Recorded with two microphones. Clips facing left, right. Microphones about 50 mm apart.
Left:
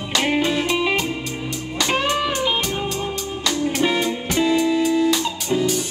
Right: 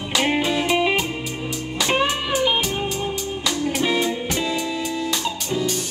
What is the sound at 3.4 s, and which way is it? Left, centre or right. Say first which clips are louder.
Music: left 2 dB; centre.